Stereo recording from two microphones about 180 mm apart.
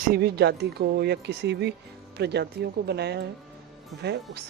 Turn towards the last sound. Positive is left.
turn(degrees=-65)  # may be behind; listen again after turning